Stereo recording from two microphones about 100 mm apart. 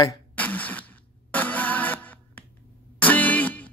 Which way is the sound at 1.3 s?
15° left (ahead or behind).